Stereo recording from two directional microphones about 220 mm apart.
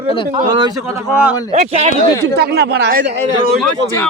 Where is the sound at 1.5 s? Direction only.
30° right (ahead or behind).